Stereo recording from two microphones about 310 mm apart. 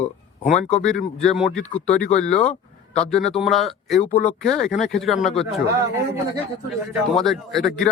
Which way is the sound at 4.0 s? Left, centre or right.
Left.